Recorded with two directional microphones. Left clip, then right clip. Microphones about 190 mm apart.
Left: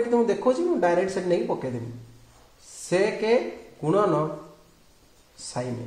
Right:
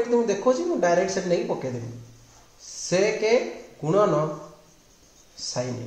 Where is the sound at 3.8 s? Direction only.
30° left (ahead or behind).